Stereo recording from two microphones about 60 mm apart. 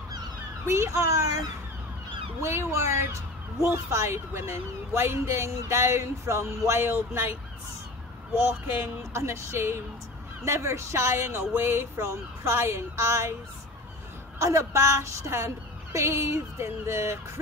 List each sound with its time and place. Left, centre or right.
0.7 s a woman's voice: right
2.4 s a woman's voice: right
9.1 s a woman's voice: right
14.4 s a woman's voice: right